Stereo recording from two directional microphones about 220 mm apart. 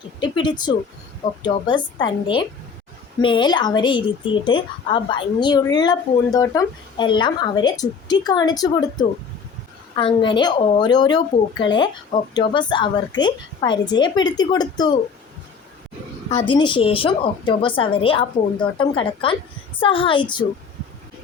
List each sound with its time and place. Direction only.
0.2 s speech: 20° left (ahead or behind)
16.3 s speech: 20° left (ahead or behind)